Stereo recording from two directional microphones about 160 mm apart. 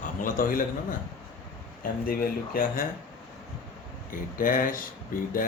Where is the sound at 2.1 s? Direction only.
70° left (ahead or behind).